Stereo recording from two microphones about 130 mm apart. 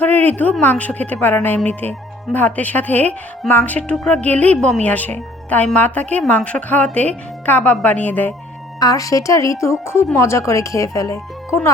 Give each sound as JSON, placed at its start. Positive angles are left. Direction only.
{"t": 0.0, "sound": "a sound", "side_deg": 15}
{"t": 0.6, "sound": "speech", "side_deg": 10}
{"t": 8.8, "sound": "a woman's voice", "side_deg": 25}